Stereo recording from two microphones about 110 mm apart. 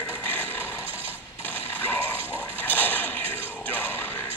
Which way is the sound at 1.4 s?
20° left (ahead or behind).